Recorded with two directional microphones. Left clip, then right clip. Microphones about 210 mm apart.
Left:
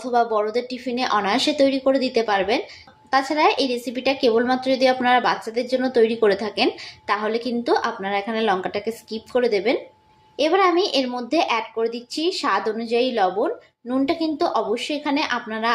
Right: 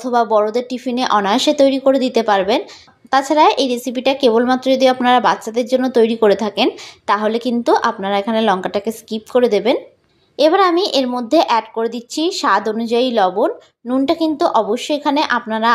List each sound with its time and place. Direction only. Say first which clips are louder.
0.0 s a woman's voice: right 6 dB; 35° right (ahead or behind)